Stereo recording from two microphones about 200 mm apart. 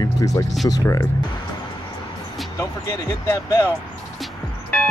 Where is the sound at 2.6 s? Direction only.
15° left (ahead or behind).